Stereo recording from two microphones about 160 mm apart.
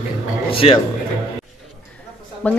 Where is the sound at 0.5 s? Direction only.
35° left (ahead or behind).